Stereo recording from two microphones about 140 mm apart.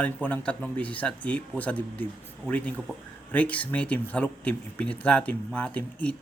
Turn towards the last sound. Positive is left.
turn(degrees=10)  # may be behind; listen again after turning